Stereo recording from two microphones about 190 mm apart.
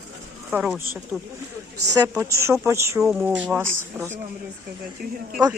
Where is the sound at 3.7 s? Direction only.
15° right (ahead or behind).